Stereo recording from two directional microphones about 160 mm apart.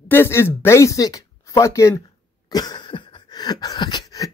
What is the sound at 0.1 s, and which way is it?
Speech, 15° left (ahead or behind).